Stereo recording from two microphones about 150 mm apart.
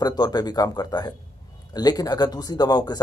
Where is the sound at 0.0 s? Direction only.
25° left (ahead or behind).